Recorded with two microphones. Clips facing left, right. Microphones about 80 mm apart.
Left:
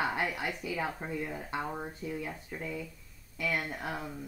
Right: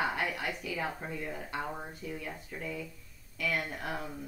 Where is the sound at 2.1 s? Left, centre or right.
Centre.